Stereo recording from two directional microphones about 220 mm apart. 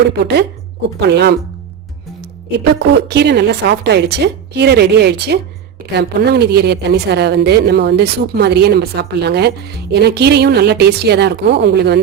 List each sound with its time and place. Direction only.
0.2 s speech: 50° right (ahead or behind)
2.7 s speech: 50° right (ahead or behind)